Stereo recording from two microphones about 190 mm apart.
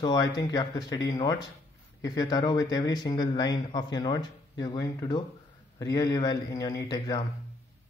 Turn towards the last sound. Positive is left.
turn(degrees=20)  # may be behind; listen again after turning